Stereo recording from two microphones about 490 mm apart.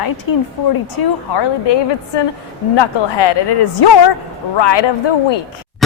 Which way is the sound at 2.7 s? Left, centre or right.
Left.